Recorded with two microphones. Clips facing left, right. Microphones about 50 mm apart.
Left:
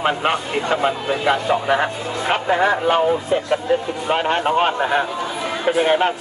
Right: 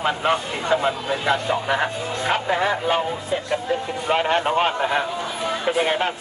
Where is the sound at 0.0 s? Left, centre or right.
Left.